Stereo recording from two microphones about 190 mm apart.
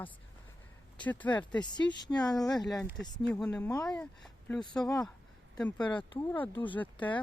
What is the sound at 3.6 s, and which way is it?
Speech, 20° left (ahead or behind).